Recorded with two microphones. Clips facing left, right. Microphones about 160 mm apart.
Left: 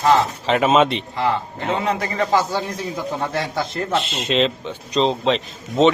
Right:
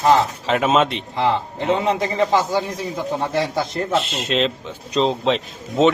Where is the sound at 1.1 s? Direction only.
20° right (ahead or behind).